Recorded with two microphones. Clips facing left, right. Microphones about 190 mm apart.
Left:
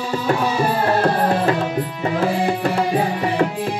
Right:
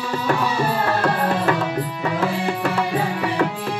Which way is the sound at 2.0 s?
30° left (ahead or behind).